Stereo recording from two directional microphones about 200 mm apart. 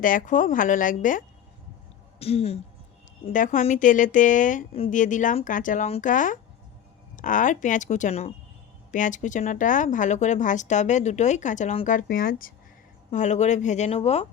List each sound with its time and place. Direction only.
0.0 s speech: 40° left (ahead or behind)
2.1 s speech: 30° left (ahead or behind)